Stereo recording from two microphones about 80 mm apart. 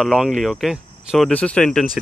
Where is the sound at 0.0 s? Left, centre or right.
Centre.